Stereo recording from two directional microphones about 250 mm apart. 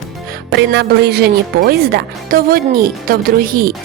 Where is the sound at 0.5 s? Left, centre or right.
Right.